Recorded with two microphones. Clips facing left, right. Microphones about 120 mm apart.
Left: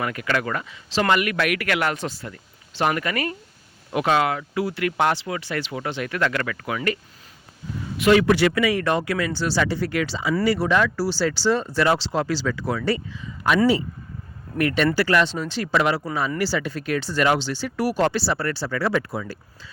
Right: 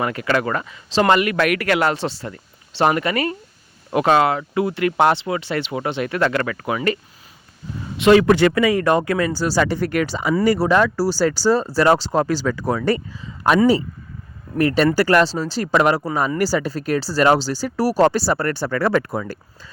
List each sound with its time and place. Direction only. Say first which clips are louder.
0.0 s speech: right 4 dB; 30° right (ahead or behind)
1.0 s speech: right 4 dB; 30° right (ahead or behind)
1.4 s speech: right 5 dB; 40° right (ahead or behind); by 3.3 s 25° right (ahead or behind)
3.9 s speech: right 5 dB; 40° right (ahead or behind)
4.3 s speech: right 4 dB; 30° right (ahead or behind)
7.9 s speech: right 4 dB; 25° right (ahead or behind)
8.2 s speech: right 4 dB; 45° right (ahead or behind)
14.6 s speech: right 4 dB; 30° right (ahead or behind)
14.9 s speech: right 4 dB; 45° right (ahead or behind)